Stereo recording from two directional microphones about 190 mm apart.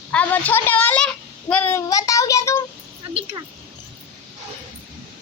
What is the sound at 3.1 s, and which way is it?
Speech, 30° right (ahead or behind).